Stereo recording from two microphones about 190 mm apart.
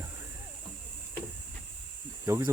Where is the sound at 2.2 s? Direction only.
15° right (ahead or behind).